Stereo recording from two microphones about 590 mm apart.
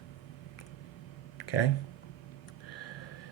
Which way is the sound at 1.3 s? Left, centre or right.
Left.